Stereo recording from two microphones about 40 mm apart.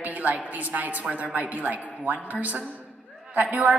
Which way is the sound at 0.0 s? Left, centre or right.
Right.